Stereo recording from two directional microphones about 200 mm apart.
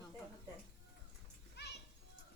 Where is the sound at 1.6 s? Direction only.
55° left (ahead or behind).